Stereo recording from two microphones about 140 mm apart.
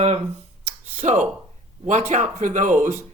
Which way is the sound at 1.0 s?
55° right (ahead or behind).